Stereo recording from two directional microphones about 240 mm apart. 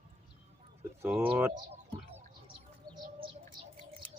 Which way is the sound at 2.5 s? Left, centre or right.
Centre.